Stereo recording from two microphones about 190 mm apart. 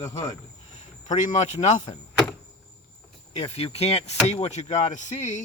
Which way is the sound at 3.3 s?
35° left (ahead or behind).